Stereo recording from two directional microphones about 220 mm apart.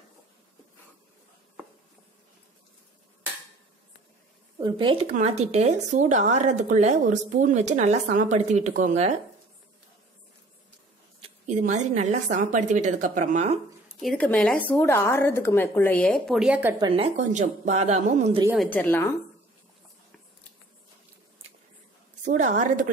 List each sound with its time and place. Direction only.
4.6 s speech: 20° right (ahead or behind)
11.1 s speech: 30° right (ahead or behind)
14.0 s a woman's voice: 5° left (ahead or behind)
16.8 s speech: 25° right (ahead or behind)
18.6 s a woman's voice: 10° left (ahead or behind)
22.2 s speech: 35° right (ahead or behind)